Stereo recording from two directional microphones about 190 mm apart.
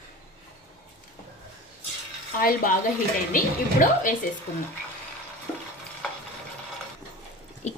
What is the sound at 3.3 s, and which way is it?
Speech, 45° left (ahead or behind).